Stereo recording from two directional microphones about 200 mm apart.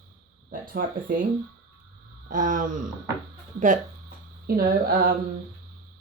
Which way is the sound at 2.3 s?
40° right (ahead or behind).